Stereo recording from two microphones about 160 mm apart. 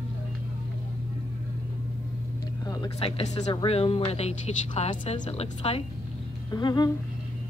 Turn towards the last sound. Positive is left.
turn(degrees=25)  # may be behind; listen again after turning